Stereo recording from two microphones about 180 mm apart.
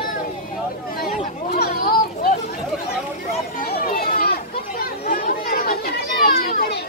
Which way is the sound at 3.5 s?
50° left (ahead or behind).